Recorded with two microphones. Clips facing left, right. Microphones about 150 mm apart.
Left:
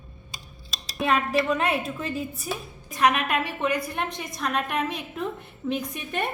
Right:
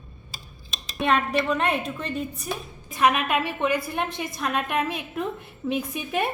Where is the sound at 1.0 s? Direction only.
Centre (ahead or behind).